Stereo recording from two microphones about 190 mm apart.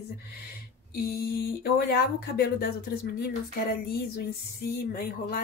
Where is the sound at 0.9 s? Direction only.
55° left (ahead or behind).